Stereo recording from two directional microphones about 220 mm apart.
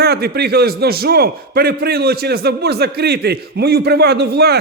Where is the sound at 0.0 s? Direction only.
45° right (ahead or behind).